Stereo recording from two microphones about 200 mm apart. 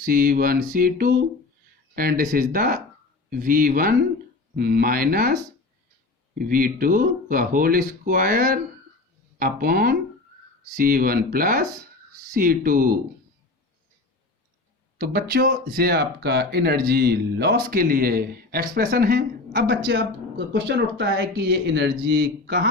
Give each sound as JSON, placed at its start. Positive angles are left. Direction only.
{"t": 0.0, "sound": "speech", "side_deg": -45}
{"t": 6.4, "sound": "speech", "side_deg": -45}
{"t": 14.9, "sound": "speech", "side_deg": -50}
{"t": 20.5, "sound": "speech", "side_deg": -60}